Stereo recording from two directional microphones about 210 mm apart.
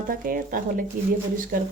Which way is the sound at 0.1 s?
40° right (ahead or behind).